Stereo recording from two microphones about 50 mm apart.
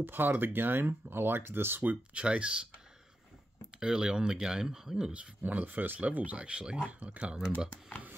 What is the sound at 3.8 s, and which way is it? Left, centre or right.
Speech, centre.